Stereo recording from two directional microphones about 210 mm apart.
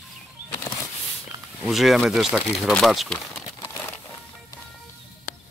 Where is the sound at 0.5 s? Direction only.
15° left (ahead or behind).